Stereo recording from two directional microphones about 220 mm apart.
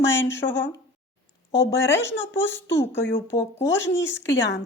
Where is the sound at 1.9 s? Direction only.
10° left (ahead or behind).